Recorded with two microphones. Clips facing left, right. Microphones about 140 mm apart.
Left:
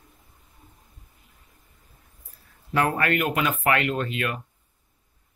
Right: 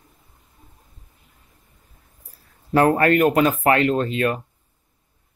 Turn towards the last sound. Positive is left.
turn(degrees=-35)  # may be behind; listen again after turning